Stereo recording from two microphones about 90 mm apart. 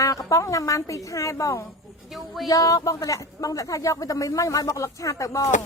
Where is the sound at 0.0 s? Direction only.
40° left (ahead or behind).